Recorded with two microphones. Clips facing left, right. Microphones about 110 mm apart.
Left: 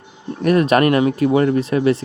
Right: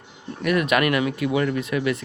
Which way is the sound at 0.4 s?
35° left (ahead or behind).